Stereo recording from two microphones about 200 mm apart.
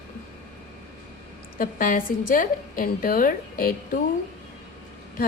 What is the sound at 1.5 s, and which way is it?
A woman's voice, 45° left (ahead or behind).